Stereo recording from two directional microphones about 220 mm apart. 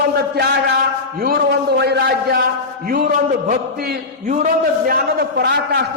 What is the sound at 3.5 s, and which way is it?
A man's voice, 40° right (ahead or behind).